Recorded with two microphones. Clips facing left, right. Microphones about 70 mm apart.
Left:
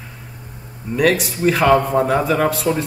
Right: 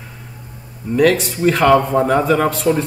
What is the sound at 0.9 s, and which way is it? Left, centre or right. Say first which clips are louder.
Speech: right 3 dB; centre.